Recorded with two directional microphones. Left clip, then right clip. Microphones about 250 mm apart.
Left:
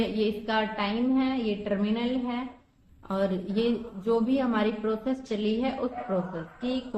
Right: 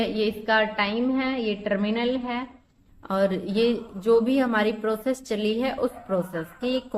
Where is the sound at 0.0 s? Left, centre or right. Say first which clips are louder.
Right 3 dB; right.